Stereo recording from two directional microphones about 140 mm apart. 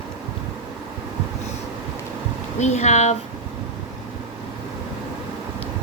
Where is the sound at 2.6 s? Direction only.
55° left (ahead or behind).